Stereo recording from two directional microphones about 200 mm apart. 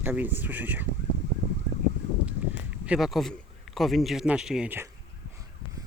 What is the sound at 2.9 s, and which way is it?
A man's voice, centre (ahead or behind).